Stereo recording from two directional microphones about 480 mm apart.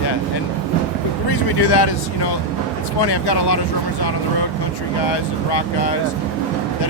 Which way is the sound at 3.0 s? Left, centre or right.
Left.